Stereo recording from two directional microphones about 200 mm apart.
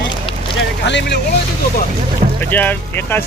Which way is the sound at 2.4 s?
10° left (ahead or behind).